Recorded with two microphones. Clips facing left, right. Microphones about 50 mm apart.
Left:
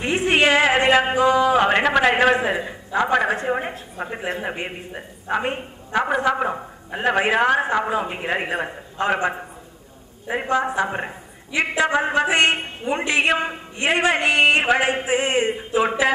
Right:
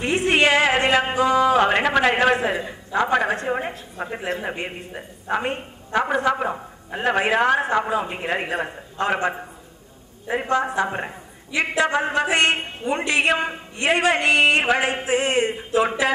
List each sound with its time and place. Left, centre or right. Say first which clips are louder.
0.0 s a sound: even; centre
1.5 s a woman's voice: left 1 dB; centre
10.4 s a woman's voice: left 1 dB; centre